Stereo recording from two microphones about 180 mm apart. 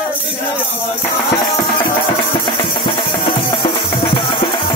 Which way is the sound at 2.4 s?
25° left (ahead or behind).